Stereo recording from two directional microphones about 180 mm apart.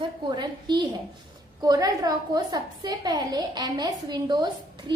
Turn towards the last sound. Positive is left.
turn(degrees=-25)  # may be behind; listen again after turning